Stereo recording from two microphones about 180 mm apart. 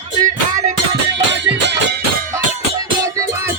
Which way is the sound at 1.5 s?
70° right (ahead or behind).